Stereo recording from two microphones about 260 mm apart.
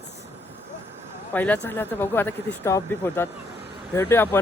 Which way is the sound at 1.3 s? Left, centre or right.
Centre.